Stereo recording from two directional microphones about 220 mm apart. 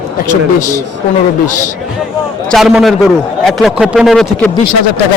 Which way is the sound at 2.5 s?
Centre (ahead or behind).